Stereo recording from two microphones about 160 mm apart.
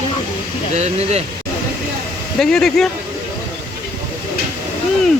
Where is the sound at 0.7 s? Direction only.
45° right (ahead or behind).